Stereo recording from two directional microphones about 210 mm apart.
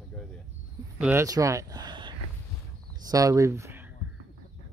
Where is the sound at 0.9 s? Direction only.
5° right (ahead or behind).